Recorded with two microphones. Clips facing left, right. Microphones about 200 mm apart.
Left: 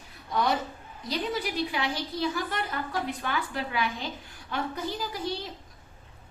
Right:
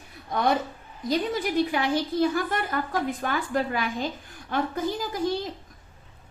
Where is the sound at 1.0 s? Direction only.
50° right (ahead or behind).